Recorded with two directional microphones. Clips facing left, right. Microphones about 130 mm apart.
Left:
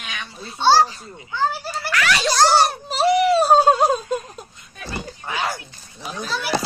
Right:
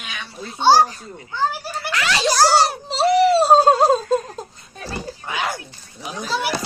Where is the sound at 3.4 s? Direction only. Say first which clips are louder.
Right 1 dB; 25° right (ahead or behind).